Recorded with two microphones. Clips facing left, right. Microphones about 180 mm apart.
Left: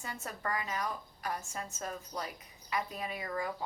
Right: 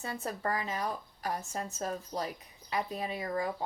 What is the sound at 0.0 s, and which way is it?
A woman's voice, 30° right (ahead or behind).